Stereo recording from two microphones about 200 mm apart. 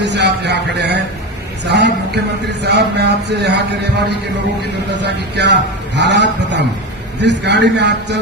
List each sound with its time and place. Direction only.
0.0 s speech: 60° right (ahead or behind)